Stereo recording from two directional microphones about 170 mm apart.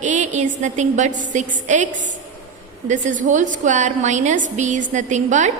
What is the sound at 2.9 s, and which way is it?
A woman's voice, 45° right (ahead or behind).